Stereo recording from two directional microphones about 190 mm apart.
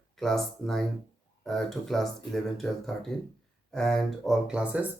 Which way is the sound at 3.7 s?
Centre (ahead or behind).